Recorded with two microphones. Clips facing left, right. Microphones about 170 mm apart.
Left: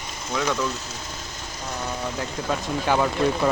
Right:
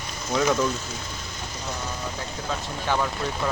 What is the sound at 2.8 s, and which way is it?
Speech, 10° left (ahead or behind).